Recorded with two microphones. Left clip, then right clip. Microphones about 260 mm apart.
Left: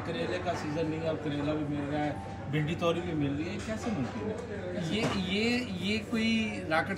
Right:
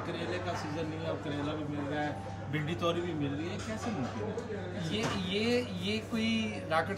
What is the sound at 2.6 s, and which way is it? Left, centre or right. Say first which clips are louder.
Speech: left 2 dB; centre.